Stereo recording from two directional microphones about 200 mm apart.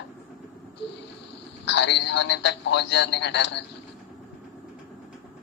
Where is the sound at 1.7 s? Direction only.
60° left (ahead or behind).